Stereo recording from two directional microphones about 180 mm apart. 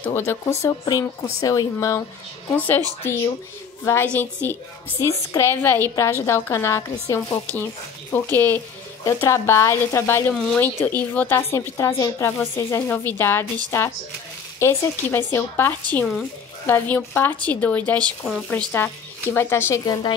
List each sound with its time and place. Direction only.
0.0 s a woman's voice: 15° left (ahead or behind)
3.8 s a woman's voice: 15° left (ahead or behind)